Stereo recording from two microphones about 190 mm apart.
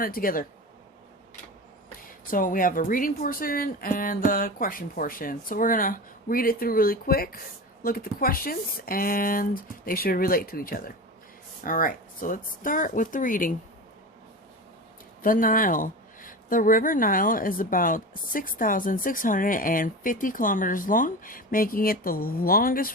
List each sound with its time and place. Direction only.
0.0 s a woman's voice: 50° left (ahead or behind)
2.3 s a woman's voice: 45° left (ahead or behind)
15.2 s a woman's voice: 45° left (ahead or behind)